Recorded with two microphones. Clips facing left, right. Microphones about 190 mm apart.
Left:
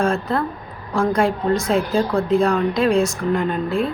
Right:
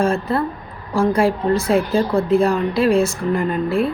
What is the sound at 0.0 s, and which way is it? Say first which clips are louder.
Speech: right 1 dB; 5° right (ahead or behind).